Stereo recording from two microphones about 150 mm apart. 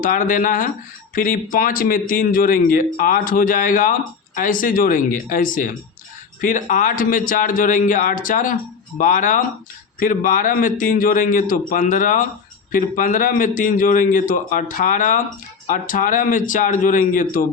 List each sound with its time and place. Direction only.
0.0 s a man's voice: 65° left (ahead or behind)